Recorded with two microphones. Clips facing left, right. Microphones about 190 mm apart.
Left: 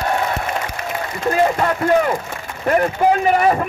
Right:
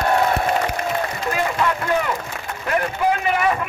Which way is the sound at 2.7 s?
40° left (ahead or behind).